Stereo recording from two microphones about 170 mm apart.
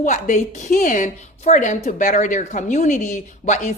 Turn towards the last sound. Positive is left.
turn(degrees=45)  # may be behind; listen again after turning